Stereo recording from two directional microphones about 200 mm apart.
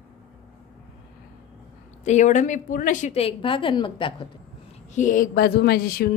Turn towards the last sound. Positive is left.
turn(degrees=50)  # may be behind; listen again after turning